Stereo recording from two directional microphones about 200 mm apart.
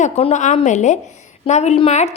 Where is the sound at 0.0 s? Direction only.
35° left (ahead or behind).